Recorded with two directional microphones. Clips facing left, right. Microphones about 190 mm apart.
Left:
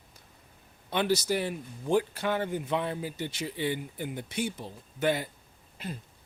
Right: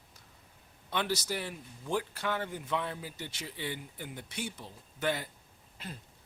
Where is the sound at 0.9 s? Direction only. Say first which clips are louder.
Left 6 dB; 15° left (ahead or behind).